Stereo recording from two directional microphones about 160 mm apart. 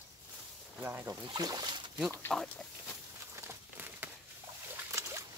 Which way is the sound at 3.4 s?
15° right (ahead or behind).